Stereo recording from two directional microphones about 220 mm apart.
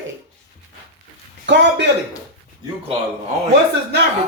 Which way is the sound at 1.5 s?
55° right (ahead or behind).